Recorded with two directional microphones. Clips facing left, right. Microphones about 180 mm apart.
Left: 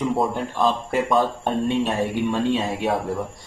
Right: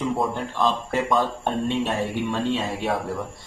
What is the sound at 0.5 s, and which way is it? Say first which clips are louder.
Speech: left 2 dB; 15° left (ahead or behind).